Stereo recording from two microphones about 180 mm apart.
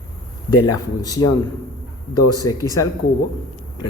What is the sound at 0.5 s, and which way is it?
A man's voice, 20° left (ahead or behind).